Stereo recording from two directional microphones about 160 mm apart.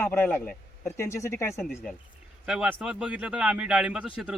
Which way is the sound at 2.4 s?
5° right (ahead or behind).